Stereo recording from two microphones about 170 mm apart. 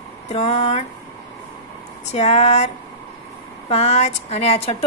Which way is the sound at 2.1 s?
40° left (ahead or behind).